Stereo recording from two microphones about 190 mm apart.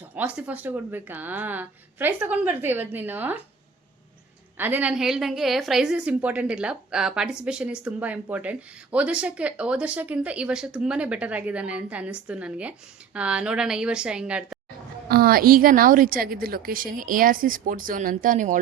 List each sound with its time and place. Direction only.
0.1 s speech: 10° right (ahead or behind)
4.5 s a woman's voice: 10° right (ahead or behind)
15.1 s a woman's voice: 50° right (ahead or behind)